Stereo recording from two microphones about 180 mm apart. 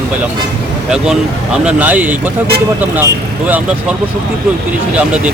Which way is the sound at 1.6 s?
10° right (ahead or behind).